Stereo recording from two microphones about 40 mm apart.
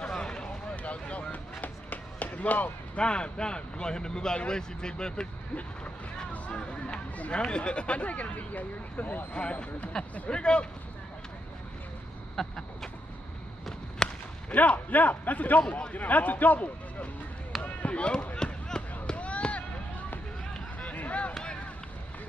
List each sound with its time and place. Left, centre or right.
0.1 s a sound: left
0.8 s chop: left
3.0 s speech: left
6.3 s speech: left
9.3 s speech: left
12.4 s vehicle: centre
14.0 s whip: centre
14.5 s a man's voice: left
17.6 s basketball bounce: left
19.0 s run: left
20.8 s a sound: left